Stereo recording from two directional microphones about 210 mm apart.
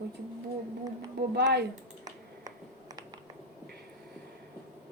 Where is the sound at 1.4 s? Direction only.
50° right (ahead or behind).